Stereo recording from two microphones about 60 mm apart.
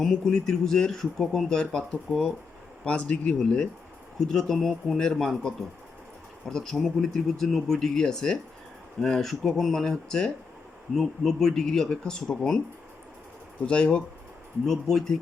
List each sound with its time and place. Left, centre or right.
0.0 s speech: centre
4.3 s speech: centre
6.4 s speech: centre
13.7 s speech: centre
14.7 s speech: centre